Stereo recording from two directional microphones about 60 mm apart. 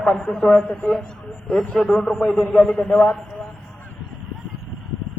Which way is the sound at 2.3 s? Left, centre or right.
Centre.